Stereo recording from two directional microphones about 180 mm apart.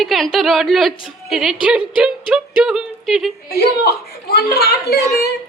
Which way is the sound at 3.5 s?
60° left (ahead or behind).